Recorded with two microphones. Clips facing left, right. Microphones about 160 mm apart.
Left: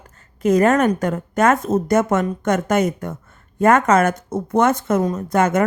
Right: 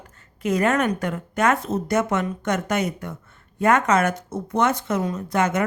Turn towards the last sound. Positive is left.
turn(degrees=45)  # may be behind; listen again after turning